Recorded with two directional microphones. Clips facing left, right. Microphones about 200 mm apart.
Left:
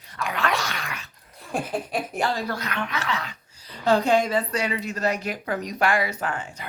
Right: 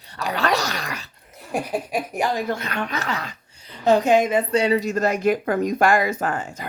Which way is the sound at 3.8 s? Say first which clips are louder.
Right 3 dB; 20° right (ahead or behind).